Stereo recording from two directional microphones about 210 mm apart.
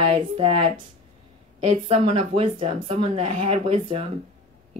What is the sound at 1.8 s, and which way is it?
Speech, 30° right (ahead or behind).